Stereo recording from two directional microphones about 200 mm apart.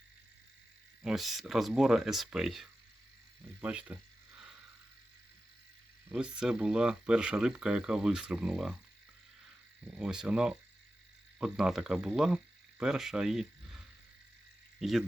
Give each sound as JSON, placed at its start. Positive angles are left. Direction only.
{"t": 1.0, "sound": "speech", "side_deg": 0}
{"t": 6.1, "sound": "speech", "side_deg": -5}
{"t": 9.8, "sound": "speech", "side_deg": -5}